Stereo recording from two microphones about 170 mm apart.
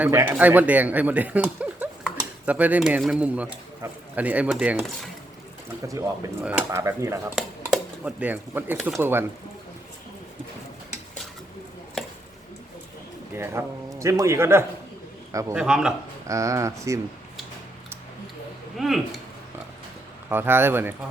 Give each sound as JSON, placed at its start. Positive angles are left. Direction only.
{"t": 0.0, "sound": "speech", "side_deg": -15}
{"t": 6.4, "sound": "speech", "side_deg": -10}
{"t": 7.3, "sound": "speech", "side_deg": 0}
{"t": 13.3, "sound": "a man's voice", "side_deg": -15}
{"t": 15.5, "sound": "speech", "side_deg": -5}
{"t": 16.2, "sound": "speech", "side_deg": -20}
{"t": 18.8, "sound": "speech", "side_deg": 0}
{"t": 20.3, "sound": "speech", "side_deg": -15}